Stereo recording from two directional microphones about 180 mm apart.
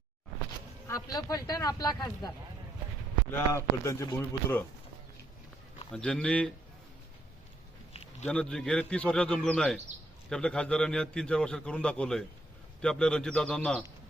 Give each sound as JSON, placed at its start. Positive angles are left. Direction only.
{"t": 0.9, "sound": "speech", "side_deg": 20}
{"t": 3.8, "sound": "speech", "side_deg": 15}
{"t": 5.9, "sound": "a man's voice", "side_deg": 5}
{"t": 8.3, "sound": "a man's voice", "side_deg": 5}